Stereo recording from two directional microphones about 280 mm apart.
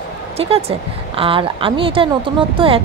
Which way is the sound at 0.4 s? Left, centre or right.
Right.